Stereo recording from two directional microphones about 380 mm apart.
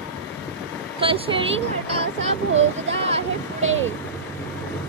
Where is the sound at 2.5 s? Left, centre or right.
Right.